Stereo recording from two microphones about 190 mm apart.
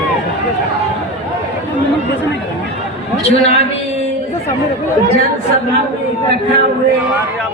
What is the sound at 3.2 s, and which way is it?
Speech, 35° left (ahead or behind).